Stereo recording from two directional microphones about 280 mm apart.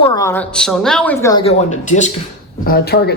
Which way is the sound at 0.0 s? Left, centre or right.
Centre.